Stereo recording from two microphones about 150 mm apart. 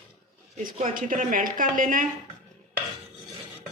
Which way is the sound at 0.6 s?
65° right (ahead or behind).